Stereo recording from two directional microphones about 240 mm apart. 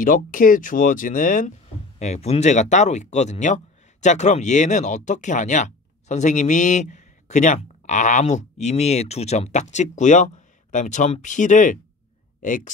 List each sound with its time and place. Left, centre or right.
0.0 s speech: left